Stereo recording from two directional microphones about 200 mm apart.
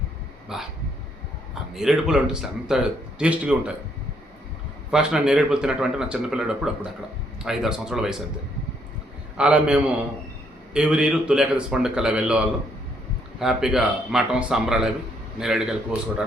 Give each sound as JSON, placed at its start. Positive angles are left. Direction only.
{"t": 0.4, "sound": "a sound", "side_deg": 0}
{"t": 1.7, "sound": "a man's voice", "side_deg": 0}
{"t": 4.9, "sound": "a man's voice", "side_deg": -5}
{"t": 9.4, "sound": "a man's voice", "side_deg": -5}
{"t": 13.4, "sound": "a man's voice", "side_deg": 0}